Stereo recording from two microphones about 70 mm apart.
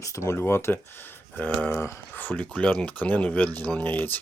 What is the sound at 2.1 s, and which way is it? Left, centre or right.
Speech, left.